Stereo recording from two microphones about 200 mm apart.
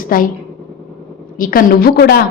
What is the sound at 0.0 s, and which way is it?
Speech, 45° left (ahead or behind).